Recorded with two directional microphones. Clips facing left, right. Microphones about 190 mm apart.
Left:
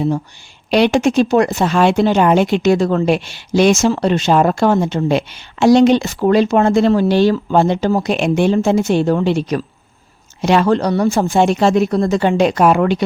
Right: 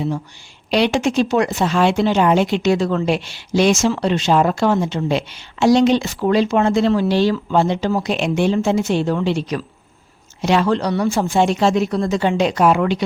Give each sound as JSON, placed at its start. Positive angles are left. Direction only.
{"t": 0.7, "sound": "speech", "side_deg": 50}